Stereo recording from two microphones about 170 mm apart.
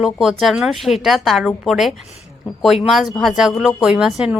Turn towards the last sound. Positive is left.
turn(degrees=-5)  # may be behind; listen again after turning